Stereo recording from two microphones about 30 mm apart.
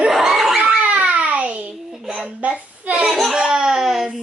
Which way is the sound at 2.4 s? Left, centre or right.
Right.